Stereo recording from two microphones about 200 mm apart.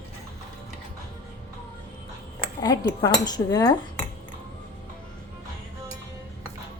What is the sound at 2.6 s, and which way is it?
Speech, 20° left (ahead or behind).